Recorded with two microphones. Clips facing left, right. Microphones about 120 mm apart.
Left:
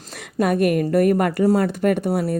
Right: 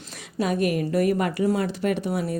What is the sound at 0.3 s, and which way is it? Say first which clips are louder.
Speech: left 5 dB; 55° left (ahead or behind).